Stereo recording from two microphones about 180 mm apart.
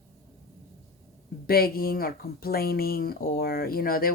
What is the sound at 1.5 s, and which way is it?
Speech, 55° left (ahead or behind).